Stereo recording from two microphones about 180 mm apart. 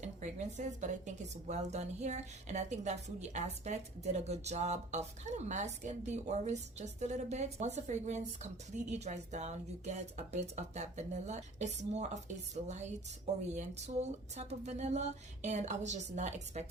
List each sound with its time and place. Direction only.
0.0 s a woman's voice: 40° right (ahead or behind)